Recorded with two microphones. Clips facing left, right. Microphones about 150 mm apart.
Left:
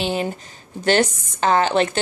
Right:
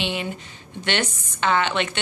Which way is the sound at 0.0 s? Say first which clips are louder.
Left 5 dB; 40° left (ahead or behind).